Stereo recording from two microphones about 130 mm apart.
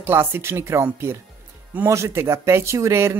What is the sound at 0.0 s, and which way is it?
Speech, 15° right (ahead or behind).